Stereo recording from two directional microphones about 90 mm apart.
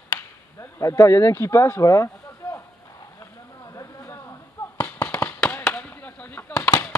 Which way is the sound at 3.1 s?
40° left (ahead or behind).